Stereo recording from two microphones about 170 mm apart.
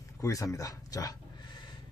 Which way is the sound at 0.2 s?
20° left (ahead or behind).